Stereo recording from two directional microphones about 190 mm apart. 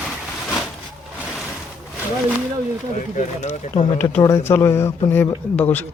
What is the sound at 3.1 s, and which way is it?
Speech, 40° left (ahead or behind).